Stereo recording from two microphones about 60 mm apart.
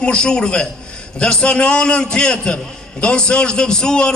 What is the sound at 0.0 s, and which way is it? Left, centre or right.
A man's voice, centre.